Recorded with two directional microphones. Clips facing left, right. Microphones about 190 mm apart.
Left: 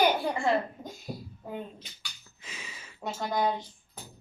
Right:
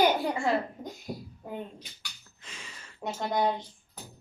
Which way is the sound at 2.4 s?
5° left (ahead or behind).